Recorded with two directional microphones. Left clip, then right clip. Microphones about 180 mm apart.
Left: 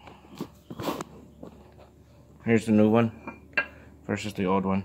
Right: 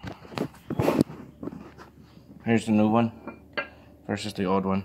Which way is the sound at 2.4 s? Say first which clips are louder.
Left 1 dB; 10° left (ahead or behind).